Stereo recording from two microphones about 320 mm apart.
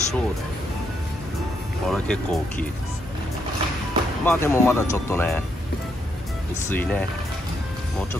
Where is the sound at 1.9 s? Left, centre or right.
Centre.